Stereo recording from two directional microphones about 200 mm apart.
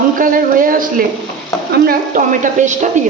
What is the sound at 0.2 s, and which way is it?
A woman's voice, 45° right (ahead or behind).